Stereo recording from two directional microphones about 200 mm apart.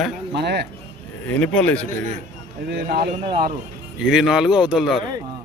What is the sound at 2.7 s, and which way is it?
Speech, 50° right (ahead or behind).